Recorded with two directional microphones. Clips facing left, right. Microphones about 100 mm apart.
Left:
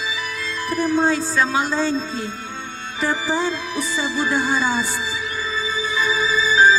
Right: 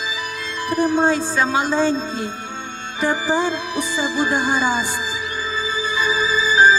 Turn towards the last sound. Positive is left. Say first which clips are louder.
# right 1 dB
turn(degrees=-15)  # may be behind; listen again after turning